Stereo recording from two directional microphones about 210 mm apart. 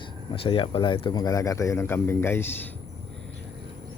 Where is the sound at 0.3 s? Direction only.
25° left (ahead or behind).